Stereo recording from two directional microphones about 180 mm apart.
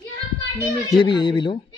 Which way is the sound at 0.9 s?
25° left (ahead or behind).